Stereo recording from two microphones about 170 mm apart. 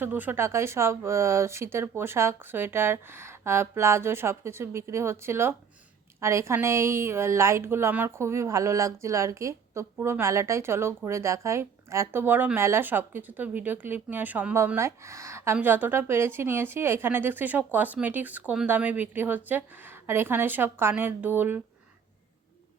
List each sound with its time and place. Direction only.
0.0 s a woman's voice: 10° right (ahead or behind)